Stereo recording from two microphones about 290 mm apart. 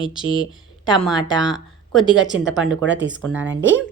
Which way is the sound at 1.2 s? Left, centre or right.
Centre.